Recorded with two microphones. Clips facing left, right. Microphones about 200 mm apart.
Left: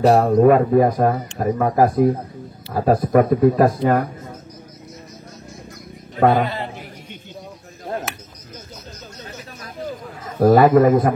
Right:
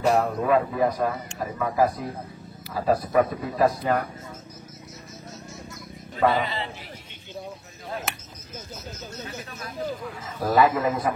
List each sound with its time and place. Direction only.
0.0 s speech: 35° left (ahead or behind)
0.4 s speech: 50° left (ahead or behind)
6.1 s speech: 50° left (ahead or behind)
7.9 s cricket: 55° left (ahead or behind)
9.8 s a sound: 50° left (ahead or behind)